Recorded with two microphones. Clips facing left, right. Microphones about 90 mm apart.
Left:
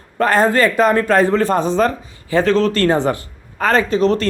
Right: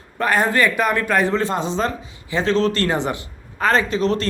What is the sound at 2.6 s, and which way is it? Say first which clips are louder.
Speech: left 3 dB; 30° right (ahead or behind).